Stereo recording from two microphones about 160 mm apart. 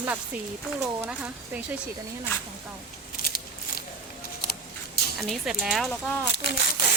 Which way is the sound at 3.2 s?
70° left (ahead or behind).